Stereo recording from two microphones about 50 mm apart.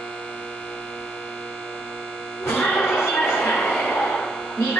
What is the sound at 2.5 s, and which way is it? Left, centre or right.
Music, left.